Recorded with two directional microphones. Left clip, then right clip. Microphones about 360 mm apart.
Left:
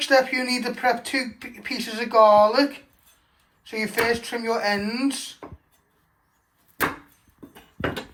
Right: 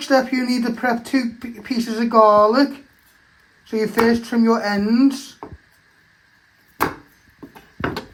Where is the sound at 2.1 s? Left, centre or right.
Right.